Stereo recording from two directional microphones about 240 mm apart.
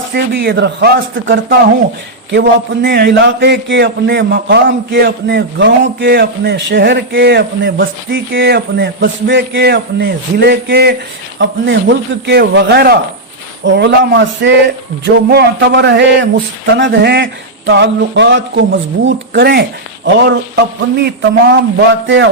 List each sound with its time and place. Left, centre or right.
0.1 s a man's voice: right